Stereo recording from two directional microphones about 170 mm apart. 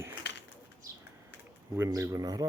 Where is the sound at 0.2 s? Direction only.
90° left.